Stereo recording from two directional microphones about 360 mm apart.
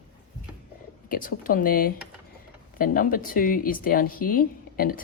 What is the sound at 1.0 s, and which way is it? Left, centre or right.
Speech, left.